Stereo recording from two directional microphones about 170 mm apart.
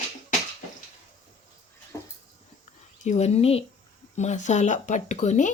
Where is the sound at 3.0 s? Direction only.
40° left (ahead or behind).